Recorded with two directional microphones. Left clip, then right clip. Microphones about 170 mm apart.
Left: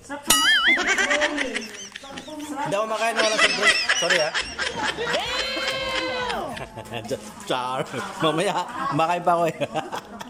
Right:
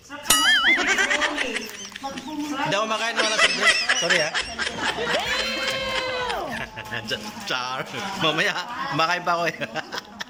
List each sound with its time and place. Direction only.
0.3 s music: centre (ahead or behind)
2.7 s snicker: centre (ahead or behind)
6.9 s a man's voice: 25° left (ahead or behind)